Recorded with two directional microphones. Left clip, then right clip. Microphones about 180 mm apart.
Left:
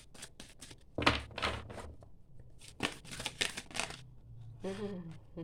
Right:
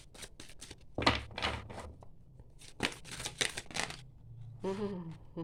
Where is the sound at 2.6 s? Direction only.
10° right (ahead or behind).